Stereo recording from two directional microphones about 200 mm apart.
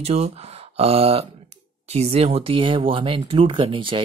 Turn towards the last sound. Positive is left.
turn(degrees=-25)  # may be behind; listen again after turning